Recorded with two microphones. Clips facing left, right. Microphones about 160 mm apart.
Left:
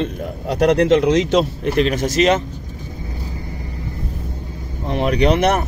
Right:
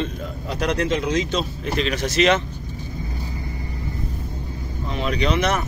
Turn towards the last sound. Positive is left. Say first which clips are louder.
# left 6 dB
turn(degrees=60)  # may be behind; listen again after turning